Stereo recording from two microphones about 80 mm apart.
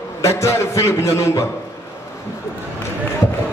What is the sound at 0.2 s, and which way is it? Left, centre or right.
A man's voice, left.